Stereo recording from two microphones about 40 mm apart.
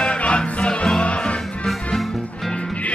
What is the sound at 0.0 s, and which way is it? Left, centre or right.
Music, left.